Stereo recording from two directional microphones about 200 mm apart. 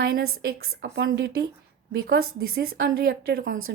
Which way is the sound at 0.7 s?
60° right (ahead or behind).